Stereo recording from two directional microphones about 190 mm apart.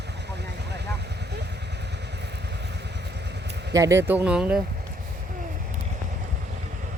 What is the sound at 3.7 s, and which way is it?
Speech, 15° right (ahead or behind).